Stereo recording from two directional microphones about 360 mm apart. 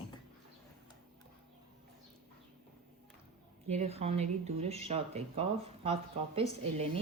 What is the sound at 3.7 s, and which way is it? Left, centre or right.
Speech, centre.